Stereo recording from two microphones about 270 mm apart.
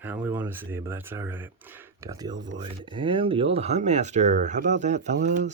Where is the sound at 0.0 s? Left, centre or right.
Centre.